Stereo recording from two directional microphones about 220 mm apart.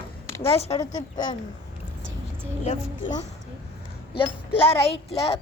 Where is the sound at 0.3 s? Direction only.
10° left (ahead or behind).